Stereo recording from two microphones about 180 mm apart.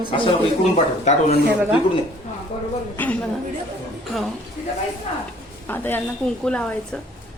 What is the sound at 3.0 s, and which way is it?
Speech, 10° left (ahead or behind).